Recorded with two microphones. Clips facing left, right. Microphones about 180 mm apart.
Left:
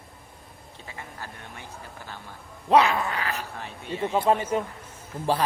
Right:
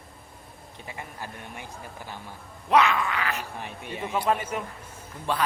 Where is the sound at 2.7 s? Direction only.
35° left (ahead or behind).